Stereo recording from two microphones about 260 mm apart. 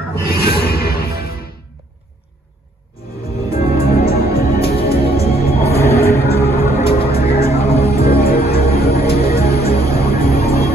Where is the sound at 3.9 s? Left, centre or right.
Left.